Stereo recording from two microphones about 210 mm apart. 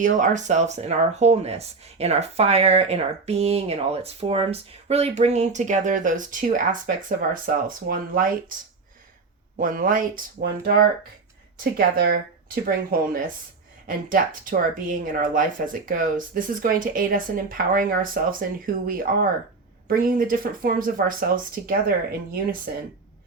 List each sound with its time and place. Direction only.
0.0 s speech: 35° right (ahead or behind)
9.6 s speech: 40° right (ahead or behind)
11.6 s speech: 45° right (ahead or behind)